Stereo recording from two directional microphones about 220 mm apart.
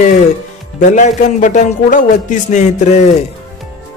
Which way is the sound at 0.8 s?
30° left (ahead or behind).